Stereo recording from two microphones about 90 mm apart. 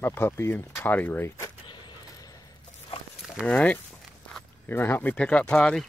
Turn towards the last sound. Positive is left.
turn(degrees=10)  # may be behind; listen again after turning